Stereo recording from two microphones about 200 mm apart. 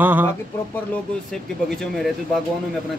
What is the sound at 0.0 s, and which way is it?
Speech, 10° right (ahead or behind).